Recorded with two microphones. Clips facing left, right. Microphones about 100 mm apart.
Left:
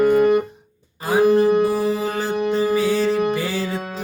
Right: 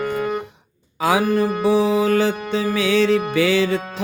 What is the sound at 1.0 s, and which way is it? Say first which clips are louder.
Music: left 2 dB; 85° right.